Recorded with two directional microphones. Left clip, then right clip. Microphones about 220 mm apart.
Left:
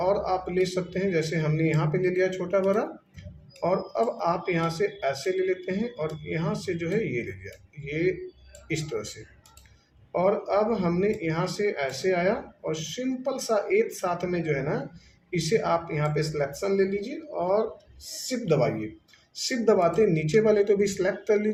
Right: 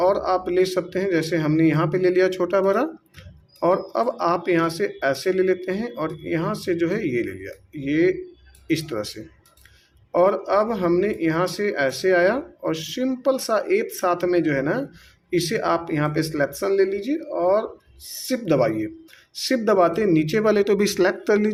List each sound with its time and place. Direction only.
0.0 s speech: 50° right (ahead or behind)
10.1 s speech: 50° right (ahead or behind)